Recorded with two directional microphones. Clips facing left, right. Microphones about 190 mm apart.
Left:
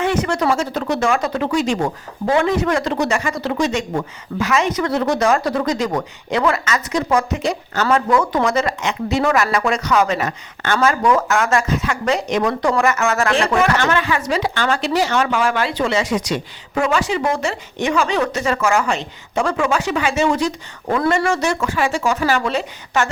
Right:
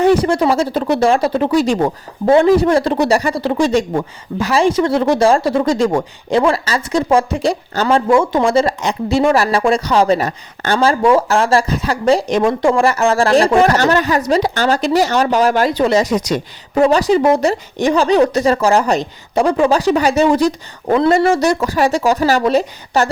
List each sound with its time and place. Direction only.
0.0 s speech: 35° right (ahead or behind)